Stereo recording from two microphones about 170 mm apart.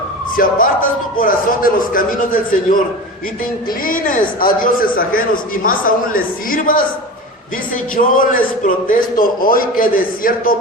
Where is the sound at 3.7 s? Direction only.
55° left (ahead or behind).